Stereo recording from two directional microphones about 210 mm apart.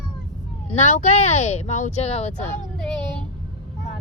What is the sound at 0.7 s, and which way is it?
Speech, 35° left (ahead or behind).